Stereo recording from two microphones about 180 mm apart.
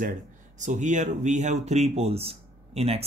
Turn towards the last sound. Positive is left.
turn(degrees=-35)  # may be behind; listen again after turning